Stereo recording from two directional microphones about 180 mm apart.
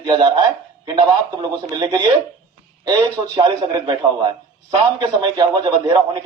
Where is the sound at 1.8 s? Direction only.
25° right (ahead or behind).